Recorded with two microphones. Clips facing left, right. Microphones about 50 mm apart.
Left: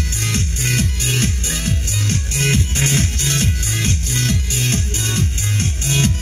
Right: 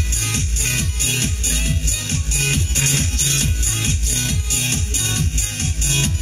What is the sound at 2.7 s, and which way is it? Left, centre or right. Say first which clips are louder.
Music: left 3 dB; left.